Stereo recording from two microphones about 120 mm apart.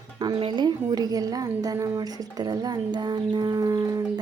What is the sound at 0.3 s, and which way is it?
A woman's voice, 40° right (ahead or behind).